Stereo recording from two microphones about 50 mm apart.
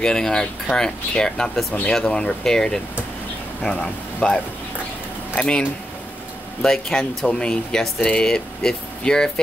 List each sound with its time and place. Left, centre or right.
0.0 s speech: centre
4.2 s speech: centre
6.6 s speech: centre
7.2 s speech: centre
8.3 s speech: centre